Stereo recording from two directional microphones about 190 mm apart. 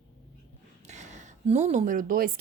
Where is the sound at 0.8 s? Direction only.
40° right (ahead or behind).